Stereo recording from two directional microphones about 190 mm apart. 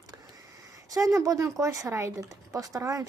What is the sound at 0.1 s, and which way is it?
Speech, 20° right (ahead or behind).